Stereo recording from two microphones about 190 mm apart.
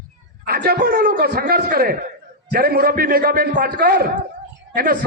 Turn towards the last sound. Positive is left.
turn(degrees=-50)  # may be behind; listen again after turning